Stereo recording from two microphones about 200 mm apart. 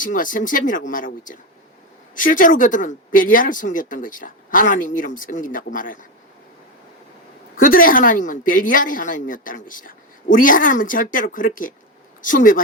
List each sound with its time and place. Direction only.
0.0 s speech: 40° left (ahead or behind)
7.5 s a woman's voice: 45° left (ahead or behind)